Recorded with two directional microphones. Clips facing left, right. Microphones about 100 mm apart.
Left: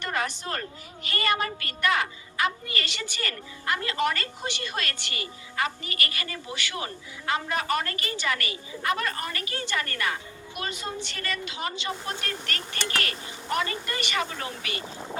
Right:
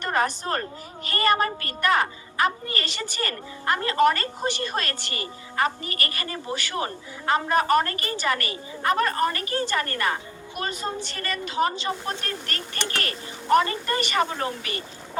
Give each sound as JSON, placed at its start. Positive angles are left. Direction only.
{"t": 0.0, "sound": "a woman's voice", "side_deg": -40}